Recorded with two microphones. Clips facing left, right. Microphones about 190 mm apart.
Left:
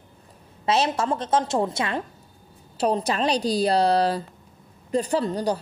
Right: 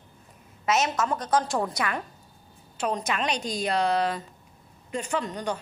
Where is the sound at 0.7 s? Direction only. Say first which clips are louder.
Left 3 dB; 30° left (ahead or behind).